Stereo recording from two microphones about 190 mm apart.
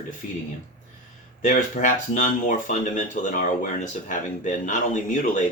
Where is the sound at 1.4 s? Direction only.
40° left (ahead or behind).